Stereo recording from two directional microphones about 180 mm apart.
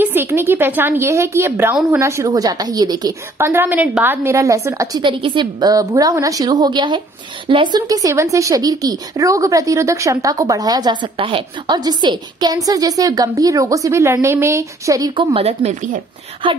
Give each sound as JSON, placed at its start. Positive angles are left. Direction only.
{"t": 0.0, "sound": "a woman's voice", "side_deg": -10}